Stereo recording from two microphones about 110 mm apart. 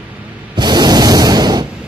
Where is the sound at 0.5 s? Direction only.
40° right (ahead or behind).